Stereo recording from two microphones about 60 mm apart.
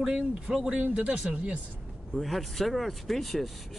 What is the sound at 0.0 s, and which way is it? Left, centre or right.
Speech, centre.